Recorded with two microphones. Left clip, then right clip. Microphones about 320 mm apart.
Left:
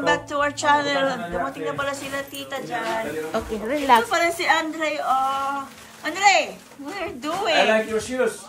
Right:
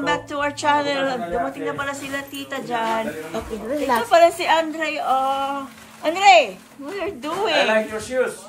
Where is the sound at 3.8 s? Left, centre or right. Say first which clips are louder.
Right 3 dB; centre.